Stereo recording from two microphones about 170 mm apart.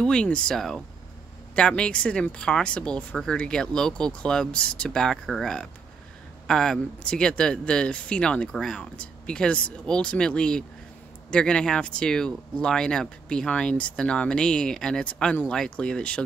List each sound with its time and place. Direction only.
0.0 s speech: 5° left (ahead or behind)